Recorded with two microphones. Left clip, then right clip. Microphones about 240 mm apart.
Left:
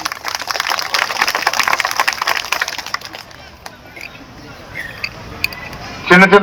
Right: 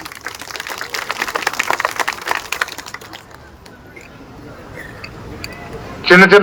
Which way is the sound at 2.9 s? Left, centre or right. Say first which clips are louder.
Left 8 dB; centre.